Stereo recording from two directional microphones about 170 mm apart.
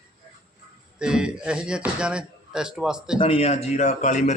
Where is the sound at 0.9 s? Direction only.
5° right (ahead or behind).